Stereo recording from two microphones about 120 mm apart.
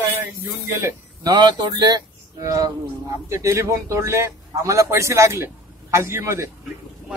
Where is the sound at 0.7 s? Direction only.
30° right (ahead or behind).